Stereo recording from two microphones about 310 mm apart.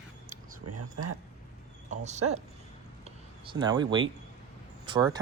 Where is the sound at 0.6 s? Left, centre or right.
Right.